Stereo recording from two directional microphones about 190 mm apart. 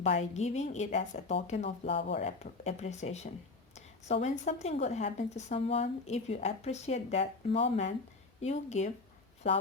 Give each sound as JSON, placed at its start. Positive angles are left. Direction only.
{"t": 0.0, "sound": "a woman's voice", "side_deg": 35}